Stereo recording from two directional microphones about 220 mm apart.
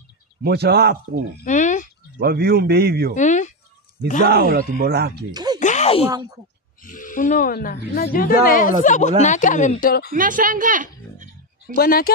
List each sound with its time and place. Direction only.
0.4 s a man's voice: 45° right (ahead or behind)
1.4 s a sound: 35° left (ahead or behind)
2.1 s a man's voice: 45° right (ahead or behind)
3.2 s speech: 35° left (ahead or behind)
4.3 s a man's voice: 45° right (ahead or behind)
5.3 s music: 20° right (ahead or behind)
5.6 s a sound: 30° left (ahead or behind)
6.8 s speech: 35° left (ahead or behind)
10.1 s a sound: 40° right (ahead or behind)
11.7 s speech: 45° left (ahead or behind)